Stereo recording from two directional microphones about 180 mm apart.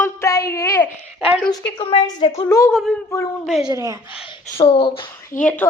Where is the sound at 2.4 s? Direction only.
15° left (ahead or behind).